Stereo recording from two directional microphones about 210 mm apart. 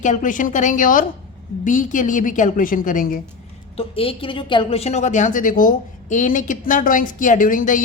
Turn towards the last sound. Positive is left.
turn(degrees=40)  # may be behind; listen again after turning